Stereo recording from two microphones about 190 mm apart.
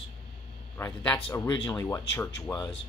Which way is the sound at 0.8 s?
15° left (ahead or behind).